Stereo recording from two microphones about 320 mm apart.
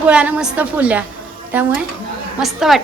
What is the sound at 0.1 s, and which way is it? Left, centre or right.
Speech, centre.